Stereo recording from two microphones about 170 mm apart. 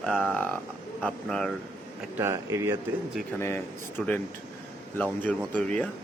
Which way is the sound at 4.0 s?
Centre (ahead or behind).